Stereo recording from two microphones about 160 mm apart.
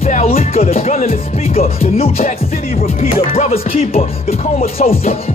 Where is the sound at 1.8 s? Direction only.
40° left (ahead or behind).